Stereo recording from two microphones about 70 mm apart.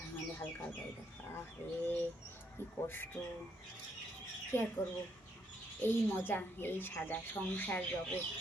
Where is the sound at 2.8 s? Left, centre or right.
Left.